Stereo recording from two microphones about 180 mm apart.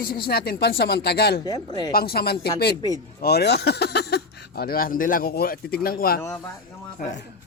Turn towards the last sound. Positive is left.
turn(degrees=50)  # may be behind; listen again after turning